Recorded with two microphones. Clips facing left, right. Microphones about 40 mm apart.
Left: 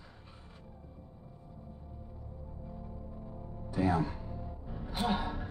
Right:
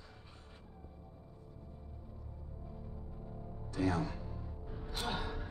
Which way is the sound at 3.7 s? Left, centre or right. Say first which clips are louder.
Left 4 dB; centre.